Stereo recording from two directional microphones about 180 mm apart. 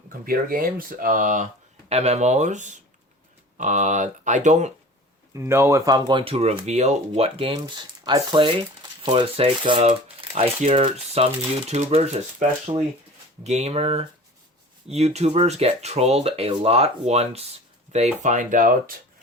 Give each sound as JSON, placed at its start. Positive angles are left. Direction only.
{"t": 0.1, "sound": "speech", "side_deg": -50}
{"t": 5.3, "sound": "speech", "side_deg": -15}